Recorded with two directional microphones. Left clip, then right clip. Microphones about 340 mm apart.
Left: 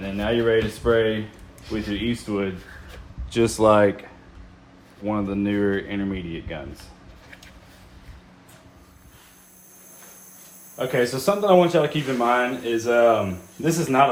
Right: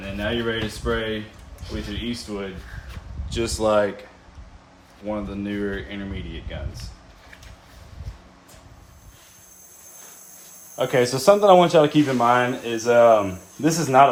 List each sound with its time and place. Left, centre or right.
0.2 s speech: centre
5.0 s speech: centre
10.8 s speech: centre